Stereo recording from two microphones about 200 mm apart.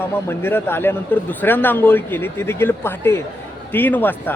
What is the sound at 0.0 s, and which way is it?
Speech, 10° left (ahead or behind).